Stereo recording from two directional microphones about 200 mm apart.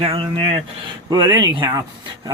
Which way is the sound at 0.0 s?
25° right (ahead or behind).